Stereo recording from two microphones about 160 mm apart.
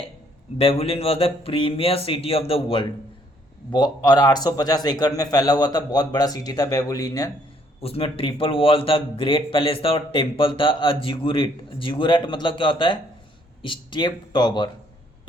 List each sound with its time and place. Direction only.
0.6 s a man's voice: 35° left (ahead or behind); by 7.3 s 20° left (ahead or behind)
7.8 s a man's voice: 35° left (ahead or behind)